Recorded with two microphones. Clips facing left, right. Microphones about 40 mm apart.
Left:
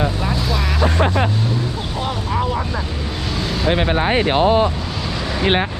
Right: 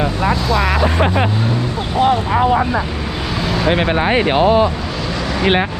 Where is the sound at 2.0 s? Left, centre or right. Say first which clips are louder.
Right 9 dB; right.